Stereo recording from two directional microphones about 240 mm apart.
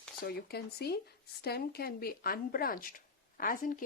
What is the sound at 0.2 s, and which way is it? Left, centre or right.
Speech, left.